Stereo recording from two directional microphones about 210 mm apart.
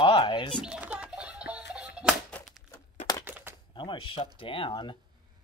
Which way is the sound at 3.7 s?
25° left (ahead or behind).